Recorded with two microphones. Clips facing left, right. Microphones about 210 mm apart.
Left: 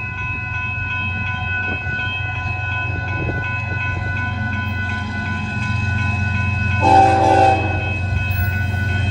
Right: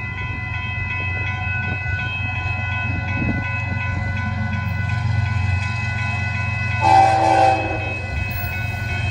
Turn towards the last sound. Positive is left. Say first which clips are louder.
# left 2 dB
turn(degrees=30)  # may be behind; listen again after turning